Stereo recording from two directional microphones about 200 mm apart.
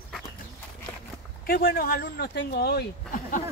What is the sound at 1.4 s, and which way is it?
Speech, 45° left (ahead or behind).